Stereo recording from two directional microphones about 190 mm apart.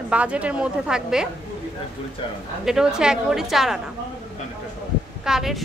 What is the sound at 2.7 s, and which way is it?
A woman's voice, 5° right (ahead or behind).